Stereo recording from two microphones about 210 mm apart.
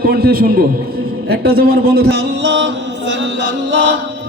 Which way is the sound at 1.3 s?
50° right (ahead or behind).